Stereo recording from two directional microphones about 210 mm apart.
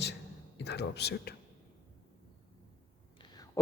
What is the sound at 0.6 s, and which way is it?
Speech, 55° left (ahead or behind).